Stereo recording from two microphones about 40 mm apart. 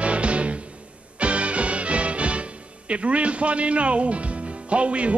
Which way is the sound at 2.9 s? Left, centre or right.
Right.